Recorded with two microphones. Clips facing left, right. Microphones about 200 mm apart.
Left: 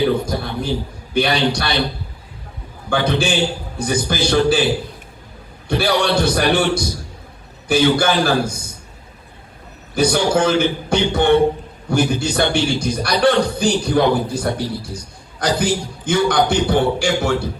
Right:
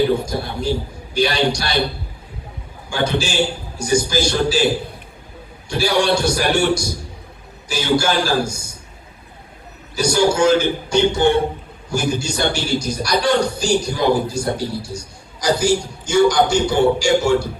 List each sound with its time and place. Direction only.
0.3 s a man's voice: 60° left (ahead or behind)
2.9 s a man's voice: 60° left (ahead or behind)
5.6 s a man's voice: 60° left (ahead or behind)
9.9 s a man's voice: 55° left (ahead or behind)